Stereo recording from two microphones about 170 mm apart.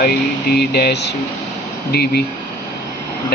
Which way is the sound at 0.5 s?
70° left (ahead or behind).